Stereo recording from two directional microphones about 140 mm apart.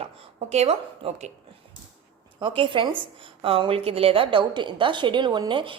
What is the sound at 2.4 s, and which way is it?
A woman's voice, 35° right (ahead or behind).